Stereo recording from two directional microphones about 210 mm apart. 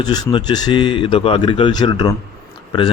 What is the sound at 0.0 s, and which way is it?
Speech, 20° left (ahead or behind).